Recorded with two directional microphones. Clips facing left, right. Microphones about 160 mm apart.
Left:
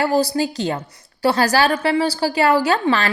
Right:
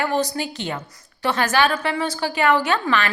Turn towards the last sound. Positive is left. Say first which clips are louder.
# left 3 dB
turn(degrees=35)  # may be behind; listen again after turning